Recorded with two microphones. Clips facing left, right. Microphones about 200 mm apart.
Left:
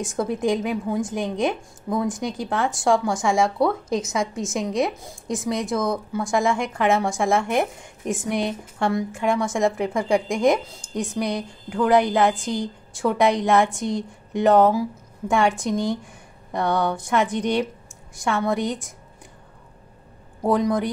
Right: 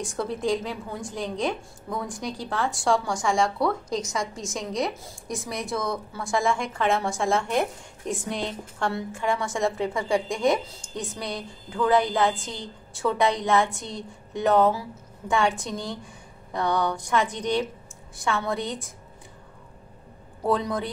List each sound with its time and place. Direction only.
0.0 s a woman's voice: 20° left (ahead or behind)
17.1 s a woman's voice: 20° left (ahead or behind)
20.4 s a woman's voice: 15° left (ahead or behind)